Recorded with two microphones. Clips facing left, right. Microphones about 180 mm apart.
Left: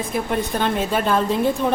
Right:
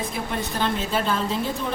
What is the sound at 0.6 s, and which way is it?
Speech, 55° left (ahead or behind).